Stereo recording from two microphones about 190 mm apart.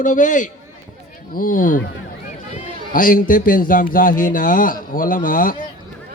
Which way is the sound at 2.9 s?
45° left (ahead or behind).